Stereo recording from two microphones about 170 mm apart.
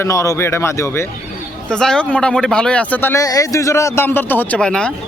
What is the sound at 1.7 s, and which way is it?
A man's voice, 5° left (ahead or behind).